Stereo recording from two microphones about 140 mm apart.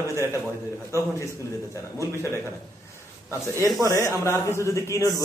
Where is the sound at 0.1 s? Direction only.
20° right (ahead or behind).